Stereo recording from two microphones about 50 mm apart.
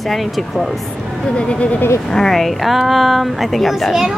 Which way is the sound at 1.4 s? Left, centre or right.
Left.